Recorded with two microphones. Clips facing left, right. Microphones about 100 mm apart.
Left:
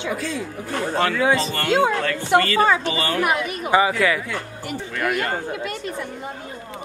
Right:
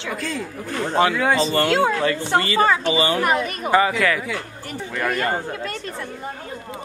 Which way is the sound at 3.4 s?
10° left (ahead or behind).